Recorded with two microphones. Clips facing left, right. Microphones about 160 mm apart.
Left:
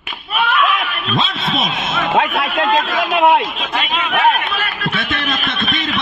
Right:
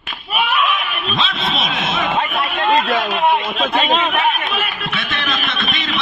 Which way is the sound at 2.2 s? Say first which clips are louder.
Left 3 dB; 85° left.